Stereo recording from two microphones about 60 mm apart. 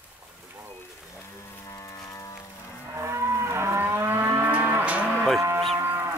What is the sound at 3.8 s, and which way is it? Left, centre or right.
Moo, right.